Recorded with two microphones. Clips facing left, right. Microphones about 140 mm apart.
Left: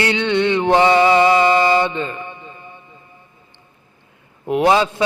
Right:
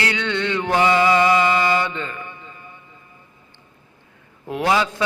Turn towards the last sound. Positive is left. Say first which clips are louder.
# left 5 dB
turn(degrees=25)  # may be behind; listen again after turning